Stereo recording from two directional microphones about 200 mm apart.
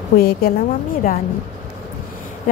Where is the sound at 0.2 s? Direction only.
50° left (ahead or behind).